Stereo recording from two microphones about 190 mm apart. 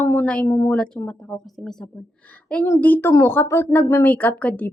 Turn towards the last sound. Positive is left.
turn(degrees=10)  # may be behind; listen again after turning